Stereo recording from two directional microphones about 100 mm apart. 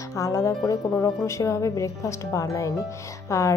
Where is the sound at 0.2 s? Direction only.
35° left (ahead or behind).